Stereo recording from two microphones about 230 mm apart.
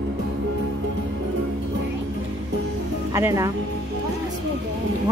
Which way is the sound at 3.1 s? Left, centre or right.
Centre.